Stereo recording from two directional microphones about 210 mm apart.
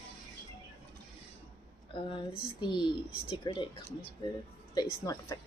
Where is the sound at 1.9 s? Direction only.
25° left (ahead or behind).